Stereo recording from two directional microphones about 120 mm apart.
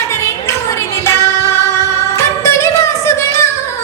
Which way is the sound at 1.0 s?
25° left (ahead or behind).